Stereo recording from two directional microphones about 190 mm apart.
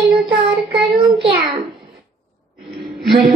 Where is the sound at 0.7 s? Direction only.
25° right (ahead or behind).